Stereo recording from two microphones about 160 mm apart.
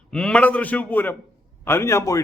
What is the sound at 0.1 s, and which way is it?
A man's voice, 5° left (ahead or behind).